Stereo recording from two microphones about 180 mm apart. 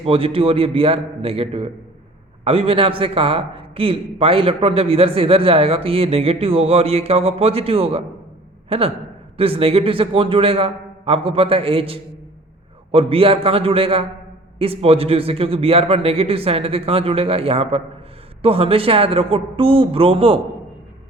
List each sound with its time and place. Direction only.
0.0 s a man's voice: 30° right (ahead or behind)